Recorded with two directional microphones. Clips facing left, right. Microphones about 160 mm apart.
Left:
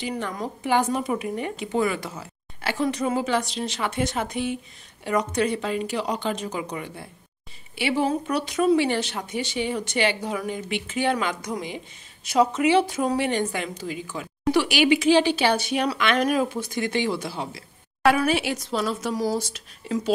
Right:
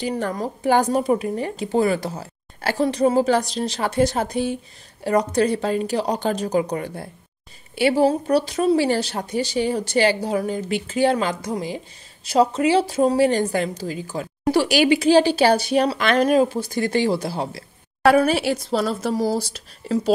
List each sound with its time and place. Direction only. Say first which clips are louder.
0.0 s a woman's voice: right 5 dB; 35° right (ahead or behind)